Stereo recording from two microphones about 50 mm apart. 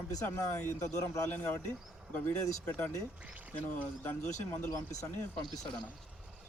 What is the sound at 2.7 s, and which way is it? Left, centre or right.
Speech, left.